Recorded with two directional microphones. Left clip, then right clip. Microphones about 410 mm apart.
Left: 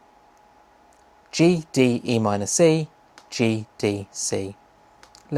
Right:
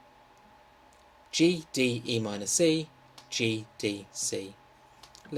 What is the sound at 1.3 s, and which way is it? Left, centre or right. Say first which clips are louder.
Speech: left 6 dB; left.